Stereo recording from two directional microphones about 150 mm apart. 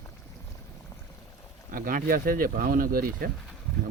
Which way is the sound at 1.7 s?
65° right (ahead or behind).